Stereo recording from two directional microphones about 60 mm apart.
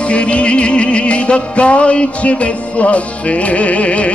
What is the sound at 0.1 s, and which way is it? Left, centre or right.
Music, centre.